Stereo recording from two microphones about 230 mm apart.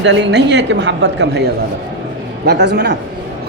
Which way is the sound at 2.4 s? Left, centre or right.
Right.